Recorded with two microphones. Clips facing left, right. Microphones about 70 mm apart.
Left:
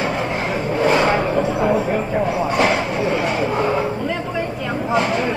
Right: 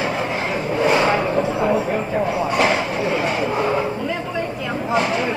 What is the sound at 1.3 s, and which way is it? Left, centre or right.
Train, centre.